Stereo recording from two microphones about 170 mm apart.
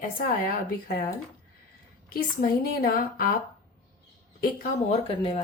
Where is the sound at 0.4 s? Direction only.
60° left (ahead or behind).